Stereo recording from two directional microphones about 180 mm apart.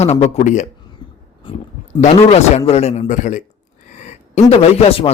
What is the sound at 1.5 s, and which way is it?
A man's voice, 30° left (ahead or behind).